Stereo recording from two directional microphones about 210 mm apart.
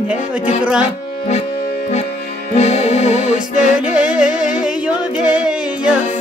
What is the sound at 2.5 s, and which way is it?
Music, 30° left (ahead or behind).